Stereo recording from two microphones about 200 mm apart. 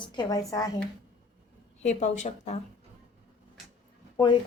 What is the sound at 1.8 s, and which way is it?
Speech, 35° left (ahead or behind).